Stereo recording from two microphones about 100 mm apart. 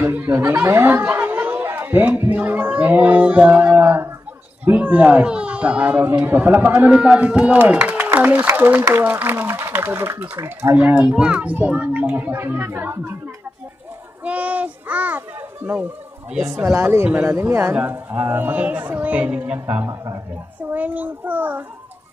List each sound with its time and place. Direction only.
0.0 s speech: 20° right (ahead or behind)
14.2 s speech: 15° right (ahead or behind)
20.7 s speech: 15° right (ahead or behind)